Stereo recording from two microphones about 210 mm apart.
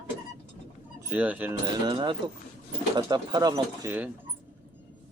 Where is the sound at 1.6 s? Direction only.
20° right (ahead or behind).